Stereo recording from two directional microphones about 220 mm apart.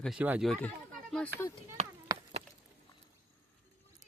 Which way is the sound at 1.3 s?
50° right (ahead or behind).